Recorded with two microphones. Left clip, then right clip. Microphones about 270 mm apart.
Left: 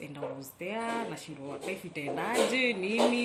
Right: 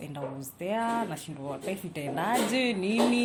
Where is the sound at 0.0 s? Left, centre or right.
Right.